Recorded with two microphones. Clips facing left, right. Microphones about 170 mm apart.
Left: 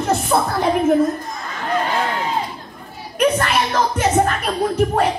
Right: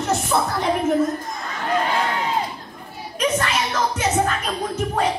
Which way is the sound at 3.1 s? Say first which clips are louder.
Left 5 dB; 55° left (ahead or behind).